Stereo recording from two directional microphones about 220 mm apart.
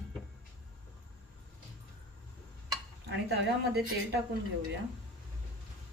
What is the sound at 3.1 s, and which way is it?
Speech, 50° right (ahead or behind).